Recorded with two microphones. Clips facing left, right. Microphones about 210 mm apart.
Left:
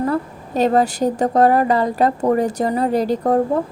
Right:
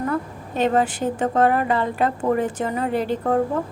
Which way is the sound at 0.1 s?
40° left (ahead or behind).